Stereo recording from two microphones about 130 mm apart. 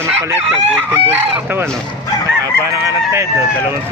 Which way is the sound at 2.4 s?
25° right (ahead or behind).